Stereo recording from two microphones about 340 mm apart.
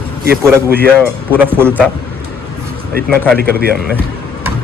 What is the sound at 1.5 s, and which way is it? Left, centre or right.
Speech, centre.